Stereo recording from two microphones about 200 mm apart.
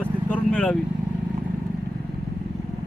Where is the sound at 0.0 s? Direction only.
5° left (ahead or behind).